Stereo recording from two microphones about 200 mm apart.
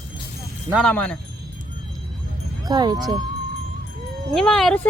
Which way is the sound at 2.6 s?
20° right (ahead or behind).